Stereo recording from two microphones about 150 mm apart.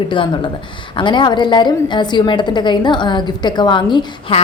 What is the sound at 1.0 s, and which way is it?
A woman's voice, 30° left (ahead or behind).